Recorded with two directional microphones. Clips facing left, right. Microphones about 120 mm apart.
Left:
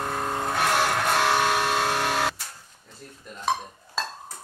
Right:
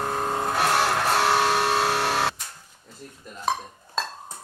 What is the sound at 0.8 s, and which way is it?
Music, 5° right (ahead or behind).